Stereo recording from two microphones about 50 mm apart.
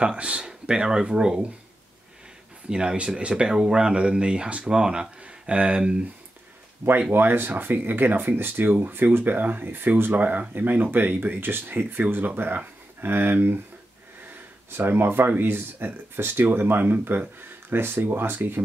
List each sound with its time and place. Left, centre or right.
0.0 s speech: centre
2.7 s speech: centre
7.1 s speech: right
14.8 s speech: right